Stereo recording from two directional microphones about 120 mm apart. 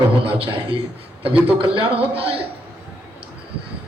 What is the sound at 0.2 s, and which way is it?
A man's voice, 50° right (ahead or behind).